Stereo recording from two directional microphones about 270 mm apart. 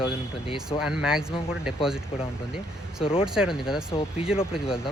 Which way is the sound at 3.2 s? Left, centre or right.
Centre.